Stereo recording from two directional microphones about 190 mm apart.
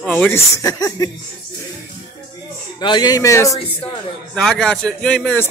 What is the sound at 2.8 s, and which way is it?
Speech, 25° left (ahead or behind).